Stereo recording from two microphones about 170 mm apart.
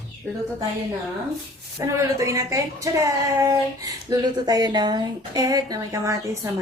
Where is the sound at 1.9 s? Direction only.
20° right (ahead or behind).